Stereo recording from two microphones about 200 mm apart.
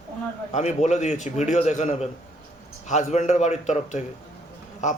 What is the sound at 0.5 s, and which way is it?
A man's voice, 35° left (ahead or behind).